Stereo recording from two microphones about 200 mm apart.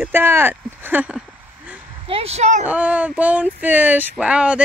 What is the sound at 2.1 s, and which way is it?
Speech, 30° right (ahead or behind).